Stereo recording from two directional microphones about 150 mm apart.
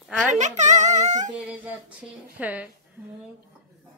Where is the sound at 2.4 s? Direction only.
10° right (ahead or behind).